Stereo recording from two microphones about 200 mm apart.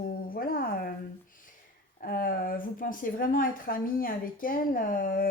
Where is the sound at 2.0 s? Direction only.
45° left (ahead or behind).